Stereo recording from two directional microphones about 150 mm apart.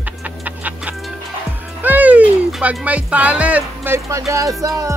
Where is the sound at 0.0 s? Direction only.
10° right (ahead or behind).